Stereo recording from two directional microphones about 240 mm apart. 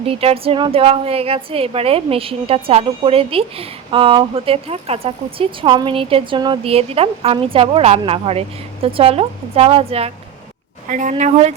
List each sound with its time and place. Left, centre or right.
0.0 s a woman's voice: right